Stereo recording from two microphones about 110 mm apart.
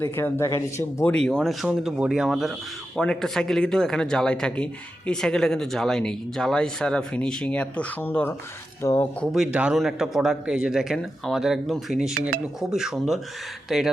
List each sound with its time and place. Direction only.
0.0 s speech: 25° left (ahead or behind)
1.1 s speech: 5° left (ahead or behind)
1.6 s speech: 5° right (ahead or behind); by 9.0 s 25° left (ahead or behind)
9.2 s speech: 5° right (ahead or behind)